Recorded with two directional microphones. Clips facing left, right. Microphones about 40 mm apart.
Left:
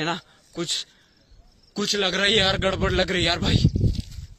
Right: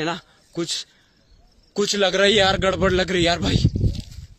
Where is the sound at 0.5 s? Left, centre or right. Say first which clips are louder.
Right 4 dB; left.